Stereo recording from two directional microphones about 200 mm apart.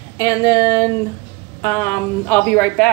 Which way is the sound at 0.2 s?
20° left (ahead or behind).